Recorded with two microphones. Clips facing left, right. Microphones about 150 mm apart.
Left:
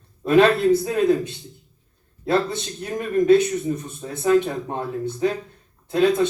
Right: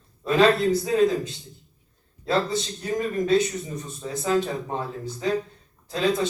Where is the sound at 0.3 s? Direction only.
60° left (ahead or behind).